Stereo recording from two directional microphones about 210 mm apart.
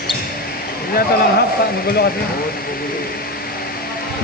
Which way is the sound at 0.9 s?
45° left (ahead or behind).